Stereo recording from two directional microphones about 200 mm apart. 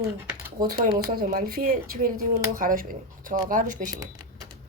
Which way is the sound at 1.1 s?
45° right (ahead or behind).